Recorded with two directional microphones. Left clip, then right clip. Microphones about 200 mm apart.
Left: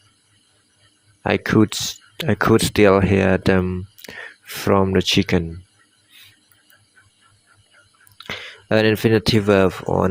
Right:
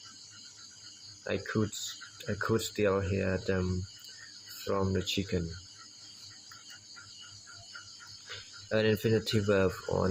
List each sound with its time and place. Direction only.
1.2 s speech: 50° left (ahead or behind)
4.6 s speech: 50° left (ahead or behind)
8.7 s speech: 50° left (ahead or behind)